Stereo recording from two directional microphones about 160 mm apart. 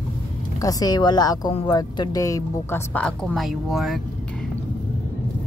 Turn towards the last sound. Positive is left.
turn(degrees=0)  # may be behind; listen again after turning